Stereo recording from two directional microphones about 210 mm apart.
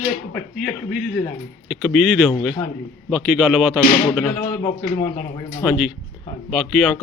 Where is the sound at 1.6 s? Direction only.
Centre (ahead or behind).